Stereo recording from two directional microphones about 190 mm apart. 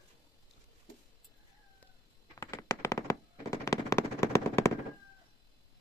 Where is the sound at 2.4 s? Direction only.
15° left (ahead or behind).